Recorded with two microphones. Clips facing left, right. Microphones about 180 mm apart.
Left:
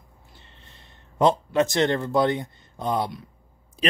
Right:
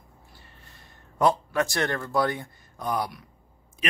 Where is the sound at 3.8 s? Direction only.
30° left (ahead or behind).